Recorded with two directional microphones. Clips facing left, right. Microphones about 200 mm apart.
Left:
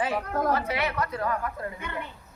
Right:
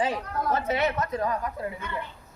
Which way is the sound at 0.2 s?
50° left (ahead or behind).